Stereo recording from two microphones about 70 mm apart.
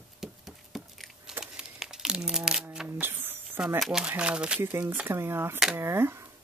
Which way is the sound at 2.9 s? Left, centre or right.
Right.